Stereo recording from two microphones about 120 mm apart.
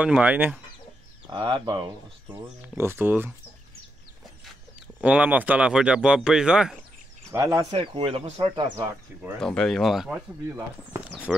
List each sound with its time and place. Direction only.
0.0 s speech: 10° right (ahead or behind)
1.3 s speech: 40° right (ahead or behind)
2.8 s speech: 20° right (ahead or behind)
5.0 s speech: 10° right (ahead or behind)
7.2 s speech: 30° right (ahead or behind)
7.8 s speech: 50° right (ahead or behind)
9.4 s speech: 5° left (ahead or behind)
10.5 s speech: 15° right (ahead or behind)